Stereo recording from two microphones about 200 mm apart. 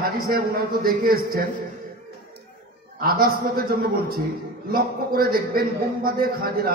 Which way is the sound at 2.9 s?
50° right (ahead or behind).